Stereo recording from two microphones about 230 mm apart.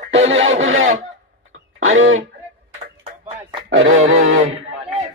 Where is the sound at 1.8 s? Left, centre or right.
Right.